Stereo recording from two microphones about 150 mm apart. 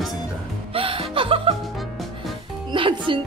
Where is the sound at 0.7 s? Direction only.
40° right (ahead or behind).